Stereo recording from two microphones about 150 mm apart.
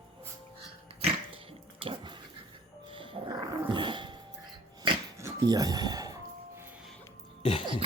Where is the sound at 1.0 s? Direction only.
35° right (ahead or behind).